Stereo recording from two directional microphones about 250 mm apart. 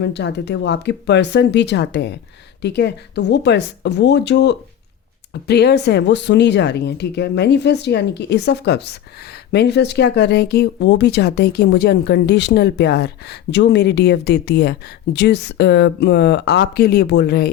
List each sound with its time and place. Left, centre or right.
0.0 s speech: left